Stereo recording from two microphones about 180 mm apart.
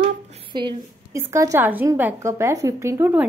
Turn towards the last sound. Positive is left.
turn(degrees=-10)  # may be behind; listen again after turning